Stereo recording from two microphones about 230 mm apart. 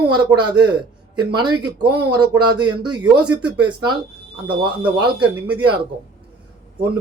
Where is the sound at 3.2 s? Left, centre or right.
Centre.